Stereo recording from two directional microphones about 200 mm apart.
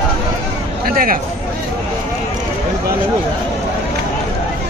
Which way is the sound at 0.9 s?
45° right (ahead or behind).